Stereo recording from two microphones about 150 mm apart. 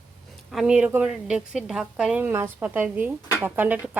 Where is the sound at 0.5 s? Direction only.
5° right (ahead or behind).